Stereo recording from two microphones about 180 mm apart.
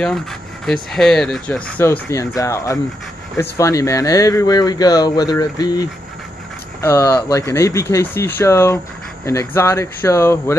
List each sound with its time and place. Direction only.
0.9 s speech: 5° left (ahead or behind)
1.9 s speech: 15° left (ahead or behind)